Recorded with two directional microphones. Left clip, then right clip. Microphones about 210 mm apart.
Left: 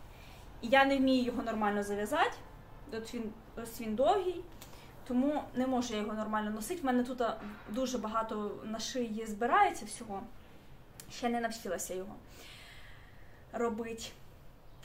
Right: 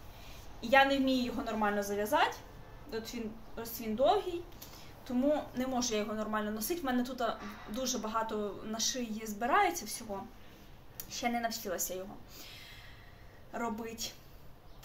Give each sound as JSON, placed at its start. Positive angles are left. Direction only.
{"t": 0.6, "sound": "a sound", "side_deg": 15}
{"t": 1.2, "sound": "speech", "side_deg": 15}
{"t": 11.1, "sound": "speech", "side_deg": 10}
{"t": 13.5, "sound": "speech", "side_deg": 15}